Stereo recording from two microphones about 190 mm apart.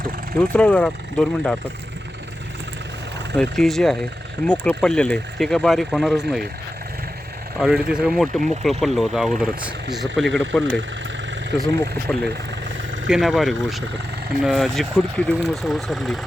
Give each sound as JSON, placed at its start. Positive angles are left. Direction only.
{"t": 0.3, "sound": "speech", "side_deg": 5}
{"t": 3.3, "sound": "speech", "side_deg": 0}
{"t": 7.6, "sound": "speech", "side_deg": -5}
{"t": 12.1, "sound": "speech", "side_deg": 5}